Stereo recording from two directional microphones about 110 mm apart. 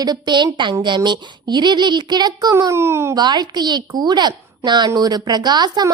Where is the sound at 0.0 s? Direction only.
40° right (ahead or behind); by 3.2 s 25° right (ahead or behind).